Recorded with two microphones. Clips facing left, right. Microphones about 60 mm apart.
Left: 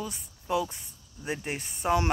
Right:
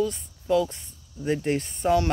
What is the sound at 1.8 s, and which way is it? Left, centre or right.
Speech, left.